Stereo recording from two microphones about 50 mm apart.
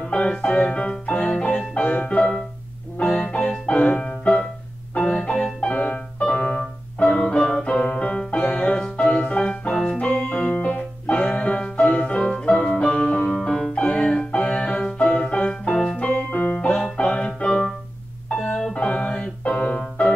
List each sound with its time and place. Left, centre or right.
0.1 s music: left
13.0 s music: left
18.3 s organ: left
18.8 s music: centre